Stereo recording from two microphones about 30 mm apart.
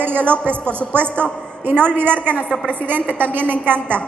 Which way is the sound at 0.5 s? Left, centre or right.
Right.